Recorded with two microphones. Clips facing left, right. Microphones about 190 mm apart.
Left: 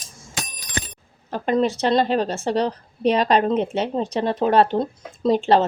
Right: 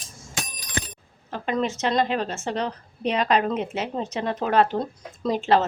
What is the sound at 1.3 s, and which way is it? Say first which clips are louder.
A woman's voice: left 5 dB; 35° left (ahead or behind).